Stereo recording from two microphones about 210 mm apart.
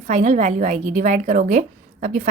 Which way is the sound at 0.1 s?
35° right (ahead or behind).